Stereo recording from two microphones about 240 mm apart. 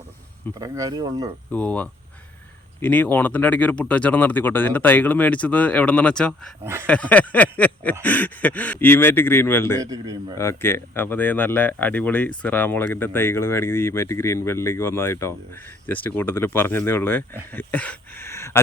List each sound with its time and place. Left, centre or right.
0.6 s speech: centre
1.5 s speech: centre
6.8 s a sound: centre
8.0 s speech: centre
9.8 s speech: centre
10.3 s speech: centre